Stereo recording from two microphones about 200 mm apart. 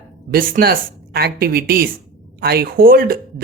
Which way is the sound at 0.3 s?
45° right (ahead or behind).